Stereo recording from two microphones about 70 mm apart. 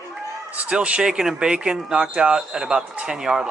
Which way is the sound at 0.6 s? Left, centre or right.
Centre.